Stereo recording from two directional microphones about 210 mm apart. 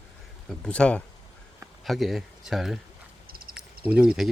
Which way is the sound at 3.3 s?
45° right (ahead or behind).